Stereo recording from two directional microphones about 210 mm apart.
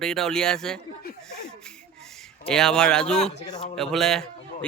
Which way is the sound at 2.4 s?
5° left (ahead or behind).